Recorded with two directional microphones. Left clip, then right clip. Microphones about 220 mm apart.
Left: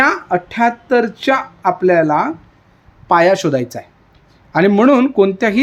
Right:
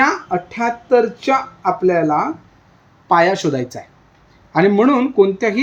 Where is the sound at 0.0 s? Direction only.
35° left (ahead or behind).